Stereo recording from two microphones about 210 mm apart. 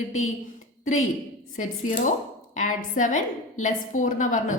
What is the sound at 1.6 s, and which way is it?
A woman's voice, 40° left (ahead or behind).